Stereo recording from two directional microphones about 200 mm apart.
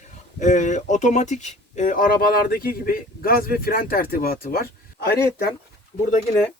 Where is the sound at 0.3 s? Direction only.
40° left (ahead or behind).